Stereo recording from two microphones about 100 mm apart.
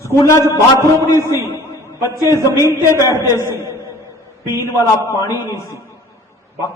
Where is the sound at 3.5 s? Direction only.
30° right (ahead or behind).